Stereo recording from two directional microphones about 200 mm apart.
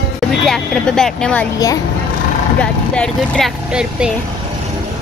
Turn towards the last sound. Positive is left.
turn(degrees=-5)  # may be behind; listen again after turning